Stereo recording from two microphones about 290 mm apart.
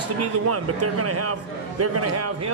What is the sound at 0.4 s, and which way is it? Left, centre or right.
A man's voice, right.